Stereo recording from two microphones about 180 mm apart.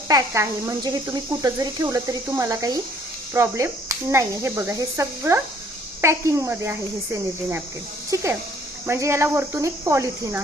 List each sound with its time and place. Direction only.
0.1 s speech: 15° right (ahead or behind)